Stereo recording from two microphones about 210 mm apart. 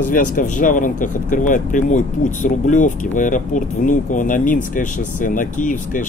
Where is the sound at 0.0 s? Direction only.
40° left (ahead or behind).